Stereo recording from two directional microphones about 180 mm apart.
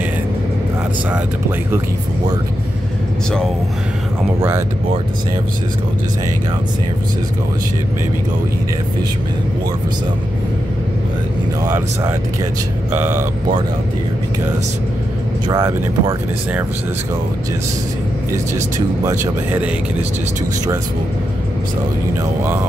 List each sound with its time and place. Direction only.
4.4 s speech: 15° right (ahead or behind)
11.6 s speech: 10° right (ahead or behind)
15.4 s speech: 20° right (ahead or behind)
19.0 s speech: 10° right (ahead or behind)